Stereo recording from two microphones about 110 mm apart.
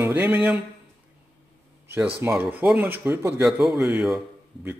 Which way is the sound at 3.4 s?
5° right (ahead or behind).